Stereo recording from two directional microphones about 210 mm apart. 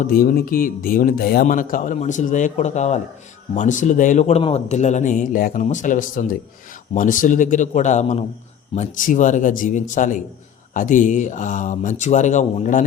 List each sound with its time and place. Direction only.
0.0 s speech: 45° left (ahead or behind)